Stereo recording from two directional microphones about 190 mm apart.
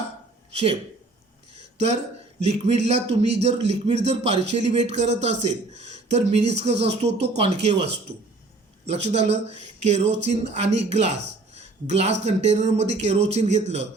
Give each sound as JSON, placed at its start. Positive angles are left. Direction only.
{"t": 0.5, "sound": "a man's voice", "side_deg": -35}
{"t": 2.4, "sound": "a man's voice", "side_deg": -35}
{"t": 8.9, "sound": "a man's voice", "side_deg": -35}
{"t": 11.5, "sound": "a sound", "side_deg": -35}
{"t": 12.2, "sound": "a man's voice", "side_deg": -35}